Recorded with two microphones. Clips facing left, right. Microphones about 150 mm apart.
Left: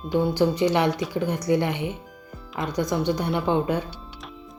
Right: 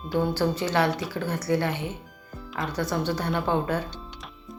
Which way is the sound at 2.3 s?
Centre (ahead or behind).